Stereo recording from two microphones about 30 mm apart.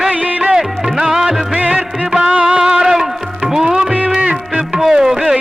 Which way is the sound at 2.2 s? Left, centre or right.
Right.